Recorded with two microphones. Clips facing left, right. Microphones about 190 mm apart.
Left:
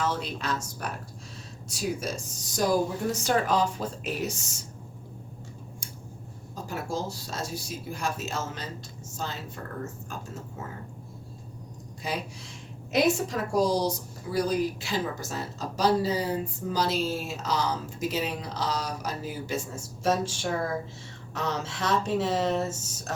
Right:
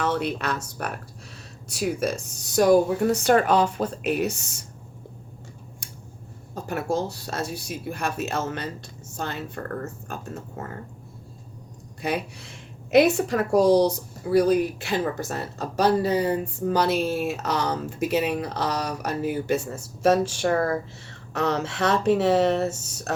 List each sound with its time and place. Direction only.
0.0 s a woman's voice: 60° right (ahead or behind)
6.5 s a woman's voice: 60° right (ahead or behind)
12.0 s a woman's voice: 60° right (ahead or behind)